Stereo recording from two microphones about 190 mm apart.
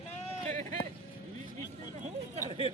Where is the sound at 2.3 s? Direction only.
30° right (ahead or behind).